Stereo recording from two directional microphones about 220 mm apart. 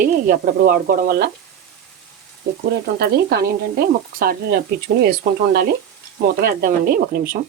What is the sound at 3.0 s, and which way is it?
Speech, 45° right (ahead or behind).